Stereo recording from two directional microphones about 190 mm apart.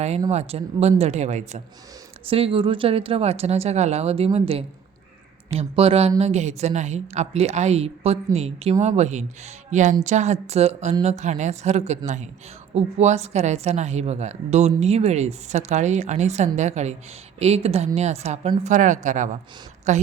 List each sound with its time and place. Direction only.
0.3 s a woman's voice: 35° right (ahead or behind)